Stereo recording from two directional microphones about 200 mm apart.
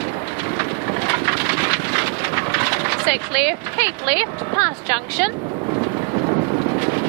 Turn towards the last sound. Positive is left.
turn(degrees=-20)  # may be behind; listen again after turning